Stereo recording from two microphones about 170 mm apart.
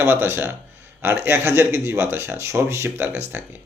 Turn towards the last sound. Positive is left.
turn(degrees=-15)  # may be behind; listen again after turning